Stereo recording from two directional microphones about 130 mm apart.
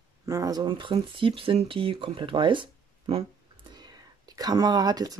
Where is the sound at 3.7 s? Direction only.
30° right (ahead or behind).